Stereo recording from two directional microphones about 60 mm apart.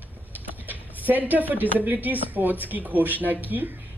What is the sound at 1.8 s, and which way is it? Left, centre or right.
A woman's voice, right.